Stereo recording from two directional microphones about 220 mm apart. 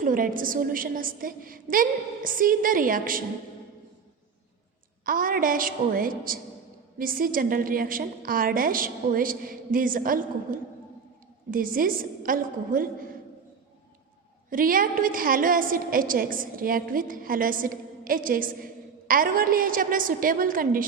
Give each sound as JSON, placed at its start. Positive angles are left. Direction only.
{"t": 0.0, "sound": "a woman's voice", "side_deg": -40}
{"t": 5.0, "sound": "a woman's voice", "side_deg": -40}
{"t": 14.5, "sound": "a woman's voice", "side_deg": -40}